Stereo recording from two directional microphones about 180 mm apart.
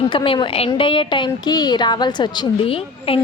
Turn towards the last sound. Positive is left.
turn(degrees=30)  # may be behind; listen again after turning